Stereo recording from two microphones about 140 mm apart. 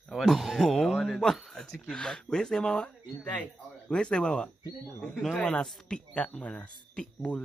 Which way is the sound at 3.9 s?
5° left (ahead or behind).